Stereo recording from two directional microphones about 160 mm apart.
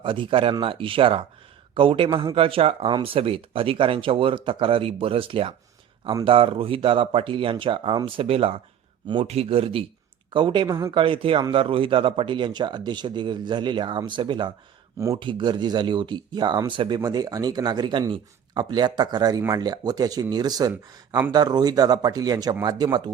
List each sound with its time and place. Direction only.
0.0 s speech: 30° right (ahead or behind)
10.9 s speech: 35° right (ahead or behind)